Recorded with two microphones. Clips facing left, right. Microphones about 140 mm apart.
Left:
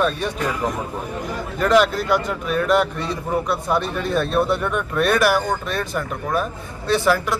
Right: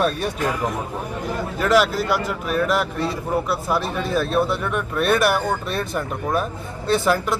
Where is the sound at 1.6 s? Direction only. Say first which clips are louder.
Left 2 dB; 5° right (ahead or behind).